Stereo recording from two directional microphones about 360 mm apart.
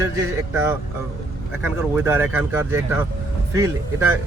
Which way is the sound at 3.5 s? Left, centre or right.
Centre.